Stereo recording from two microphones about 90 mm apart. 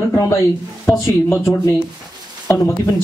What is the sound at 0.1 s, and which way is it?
Speech, 35° left (ahead or behind).